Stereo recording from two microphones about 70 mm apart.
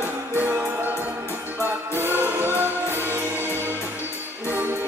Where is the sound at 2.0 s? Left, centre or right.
Right.